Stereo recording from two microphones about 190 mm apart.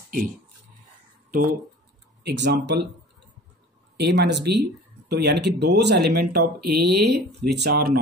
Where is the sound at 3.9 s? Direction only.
60° right (ahead or behind).